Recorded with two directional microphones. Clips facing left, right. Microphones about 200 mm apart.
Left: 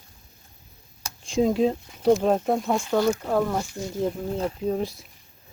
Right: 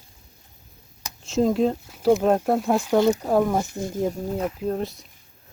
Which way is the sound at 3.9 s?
15° right (ahead or behind).